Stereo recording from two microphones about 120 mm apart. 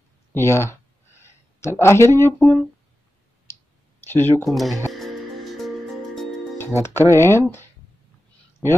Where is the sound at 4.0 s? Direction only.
20° left (ahead or behind).